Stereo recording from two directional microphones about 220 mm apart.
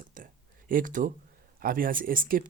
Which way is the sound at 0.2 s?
35° right (ahead or behind).